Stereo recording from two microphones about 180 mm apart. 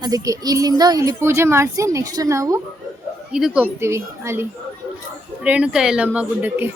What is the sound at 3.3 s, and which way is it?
Speech, 5° right (ahead or behind).